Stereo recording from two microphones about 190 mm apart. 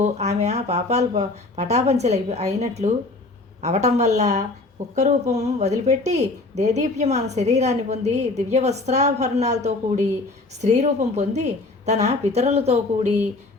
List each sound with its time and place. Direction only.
0.0 s a woman's voice: 35° right (ahead or behind)